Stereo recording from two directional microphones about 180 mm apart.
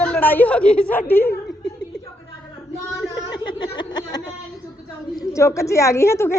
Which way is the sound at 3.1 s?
25° left (ahead or behind).